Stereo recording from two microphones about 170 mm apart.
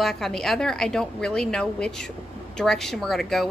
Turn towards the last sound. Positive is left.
turn(degrees=0)  # may be behind; listen again after turning